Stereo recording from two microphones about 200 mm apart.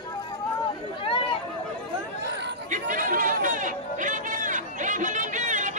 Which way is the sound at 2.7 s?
45° right (ahead or behind).